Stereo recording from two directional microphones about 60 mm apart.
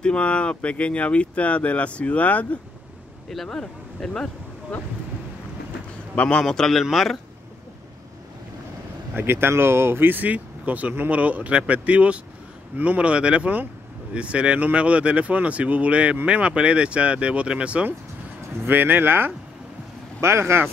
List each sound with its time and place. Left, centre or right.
0.0 s speech: centre
3.4 s speech: centre
6.2 s speech: centre
9.1 s speech: right; by 17.8 s centre
18.7 s speech: right
20.2 s speech: right